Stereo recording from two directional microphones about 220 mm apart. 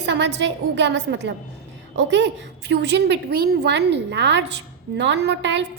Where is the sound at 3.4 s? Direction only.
45° right (ahead or behind).